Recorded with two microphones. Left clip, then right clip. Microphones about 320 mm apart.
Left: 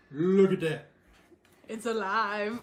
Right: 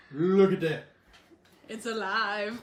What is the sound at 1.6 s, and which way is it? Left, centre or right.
Speech, left.